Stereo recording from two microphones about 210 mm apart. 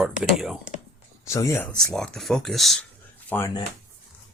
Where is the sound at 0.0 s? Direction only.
Centre (ahead or behind).